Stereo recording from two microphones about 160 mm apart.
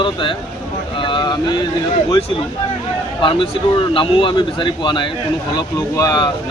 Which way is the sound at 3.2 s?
30° left (ahead or behind).